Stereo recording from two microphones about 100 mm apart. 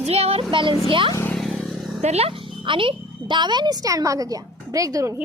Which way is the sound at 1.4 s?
5° left (ahead or behind).